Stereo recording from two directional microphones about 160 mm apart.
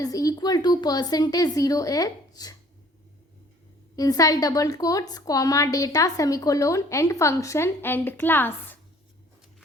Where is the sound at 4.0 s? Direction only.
20° left (ahead or behind).